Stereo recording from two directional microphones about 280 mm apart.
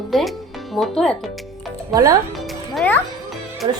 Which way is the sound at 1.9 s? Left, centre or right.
Centre.